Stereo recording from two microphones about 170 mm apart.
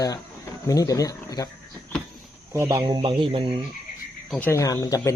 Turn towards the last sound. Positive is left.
turn(degrees=20)  # may be behind; listen again after turning